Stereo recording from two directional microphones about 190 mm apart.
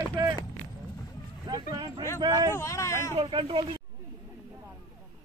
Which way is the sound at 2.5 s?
15° left (ahead or behind).